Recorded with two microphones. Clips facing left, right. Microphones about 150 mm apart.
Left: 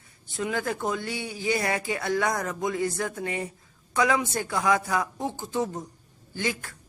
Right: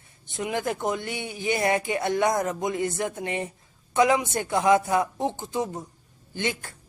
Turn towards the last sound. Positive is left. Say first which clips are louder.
# right 1 dB
turn(degrees=-25)  # may be behind; listen again after turning